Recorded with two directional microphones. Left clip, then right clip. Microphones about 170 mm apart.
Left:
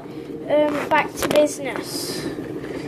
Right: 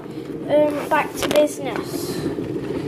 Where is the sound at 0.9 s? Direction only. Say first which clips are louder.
Even; 45° left (ahead or behind).